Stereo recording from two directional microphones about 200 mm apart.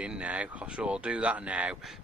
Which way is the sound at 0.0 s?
5° right (ahead or behind).